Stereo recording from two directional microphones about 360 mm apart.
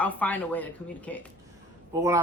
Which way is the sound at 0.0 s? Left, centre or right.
Centre.